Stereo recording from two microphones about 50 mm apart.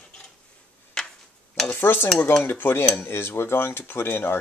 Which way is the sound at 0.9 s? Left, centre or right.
Centre.